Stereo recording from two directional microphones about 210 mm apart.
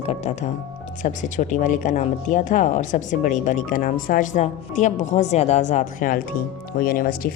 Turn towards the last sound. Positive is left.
turn(degrees=45)  # may be behind; listen again after turning